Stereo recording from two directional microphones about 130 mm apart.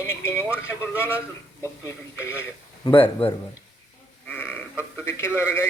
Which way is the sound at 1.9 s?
20° left (ahead or behind).